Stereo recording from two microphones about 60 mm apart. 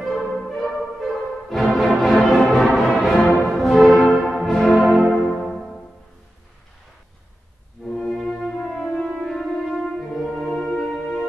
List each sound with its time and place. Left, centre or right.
0.0 s music: centre
5.1 s music: centre
5.4 s music: centre
7.9 s music: centre
9.1 s french horn: centre